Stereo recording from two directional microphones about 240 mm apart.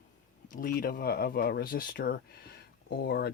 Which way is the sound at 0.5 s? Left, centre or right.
Left.